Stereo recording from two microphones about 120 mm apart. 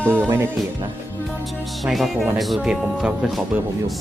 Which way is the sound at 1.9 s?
Centre (ahead or behind).